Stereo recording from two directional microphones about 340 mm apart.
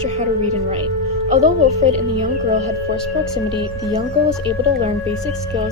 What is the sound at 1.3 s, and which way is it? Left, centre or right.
Speech, right.